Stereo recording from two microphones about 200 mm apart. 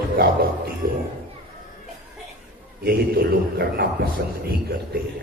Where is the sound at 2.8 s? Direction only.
50° right (ahead or behind).